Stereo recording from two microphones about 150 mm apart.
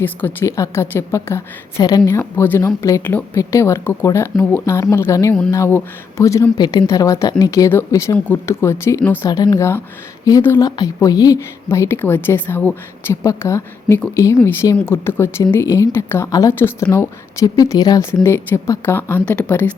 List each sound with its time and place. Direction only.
0.0 s speech: 15° left (ahead or behind)